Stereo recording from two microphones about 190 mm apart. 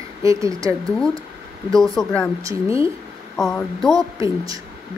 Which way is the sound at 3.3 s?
Centre (ahead or behind).